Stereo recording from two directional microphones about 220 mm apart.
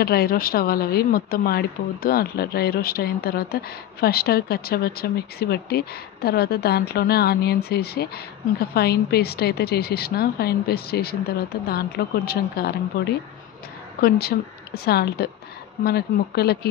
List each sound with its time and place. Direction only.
0.0 s speech: 45° left (ahead or behind)